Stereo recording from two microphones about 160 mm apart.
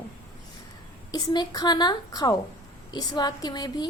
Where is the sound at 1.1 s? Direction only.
25° left (ahead or behind).